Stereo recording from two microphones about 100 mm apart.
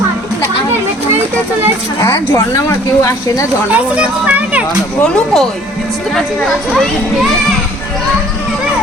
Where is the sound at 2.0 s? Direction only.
30° left (ahead or behind).